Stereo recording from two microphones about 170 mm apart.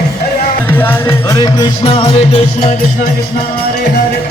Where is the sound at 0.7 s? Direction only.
10° left (ahead or behind).